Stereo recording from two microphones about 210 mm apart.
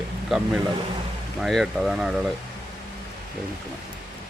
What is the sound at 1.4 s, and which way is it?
Speech, centre (ahead or behind).